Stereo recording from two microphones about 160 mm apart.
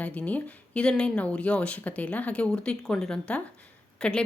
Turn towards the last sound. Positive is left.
turn(degrees=5)  # may be behind; listen again after turning